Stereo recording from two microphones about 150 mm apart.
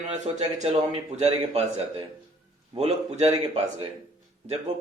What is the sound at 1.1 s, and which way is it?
Speech, 45° right (ahead or behind).